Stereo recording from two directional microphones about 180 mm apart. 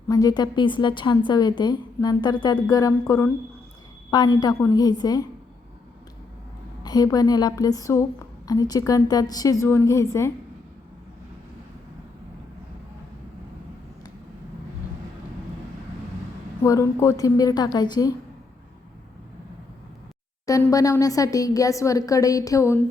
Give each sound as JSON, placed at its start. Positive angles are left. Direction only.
{"t": 0.1, "sound": "a woman's voice", "side_deg": 20}
{"t": 6.8, "sound": "a woman's voice", "side_deg": 20}
{"t": 16.6, "sound": "a woman's voice", "side_deg": 15}
{"t": 20.5, "sound": "a woman's voice", "side_deg": 20}